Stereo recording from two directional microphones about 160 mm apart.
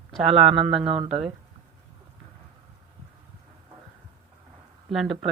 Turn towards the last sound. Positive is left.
turn(degrees=0)  # may be behind; listen again after turning